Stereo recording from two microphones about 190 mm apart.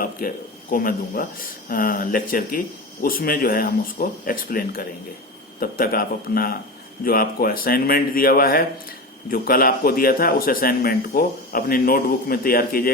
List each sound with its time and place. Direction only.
0.2 s speech: 50° left (ahead or behind)